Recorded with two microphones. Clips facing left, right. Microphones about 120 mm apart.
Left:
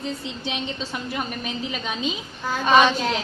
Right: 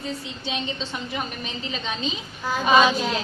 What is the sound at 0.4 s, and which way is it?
Speech, 15° left (ahead or behind).